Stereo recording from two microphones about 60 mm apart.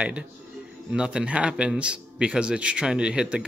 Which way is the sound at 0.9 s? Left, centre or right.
Centre.